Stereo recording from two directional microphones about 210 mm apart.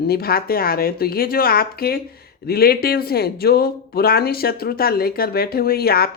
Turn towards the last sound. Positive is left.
turn(degrees=45)  # may be behind; listen again after turning